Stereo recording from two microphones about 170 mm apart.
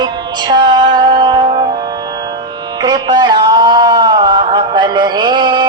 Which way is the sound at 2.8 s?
25° right (ahead or behind).